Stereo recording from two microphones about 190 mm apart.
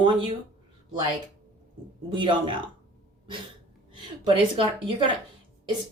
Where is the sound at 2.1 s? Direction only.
25° right (ahead or behind).